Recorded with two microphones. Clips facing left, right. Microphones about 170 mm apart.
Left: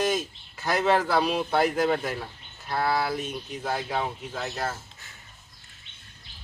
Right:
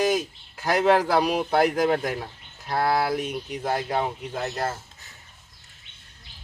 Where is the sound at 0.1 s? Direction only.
10° right (ahead or behind).